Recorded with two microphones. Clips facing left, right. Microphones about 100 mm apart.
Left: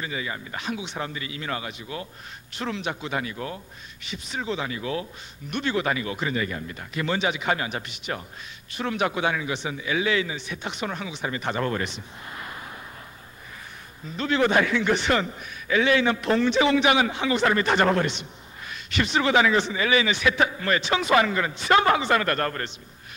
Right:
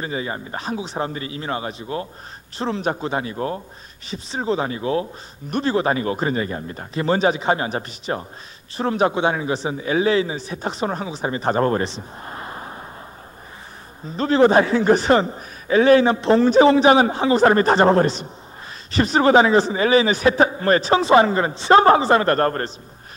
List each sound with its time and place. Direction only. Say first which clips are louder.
0.0 s a man's voice: right 5 dB; 35° right (ahead or behind)
14.0 s a man's voice: right 8 dB; 35° right (ahead or behind)